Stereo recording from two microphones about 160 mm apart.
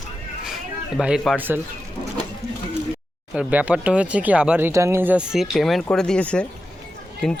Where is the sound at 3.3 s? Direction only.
10° right (ahead or behind).